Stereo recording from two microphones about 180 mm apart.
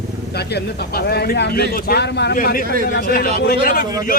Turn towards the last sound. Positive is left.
turn(degrees=55)  # may be behind; listen again after turning